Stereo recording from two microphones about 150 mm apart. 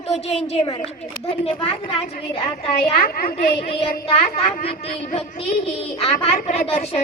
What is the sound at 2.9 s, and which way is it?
Speech, 75° left (ahead or behind).